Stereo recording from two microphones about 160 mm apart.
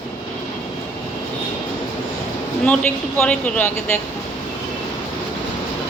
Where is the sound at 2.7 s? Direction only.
10° left (ahead or behind).